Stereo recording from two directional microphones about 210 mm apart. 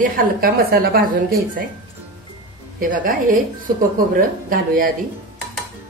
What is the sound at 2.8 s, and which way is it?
Speech, 40° right (ahead or behind).